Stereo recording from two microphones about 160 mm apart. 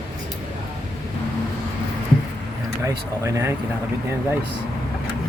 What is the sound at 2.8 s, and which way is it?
Speech, 20° right (ahead or behind).